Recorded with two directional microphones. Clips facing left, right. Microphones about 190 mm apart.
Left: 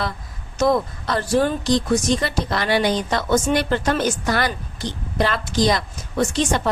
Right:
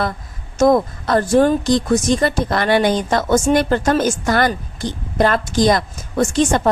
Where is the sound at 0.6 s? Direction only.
50° right (ahead or behind).